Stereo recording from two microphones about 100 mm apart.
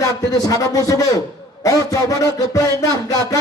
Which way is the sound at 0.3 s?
35° left (ahead or behind).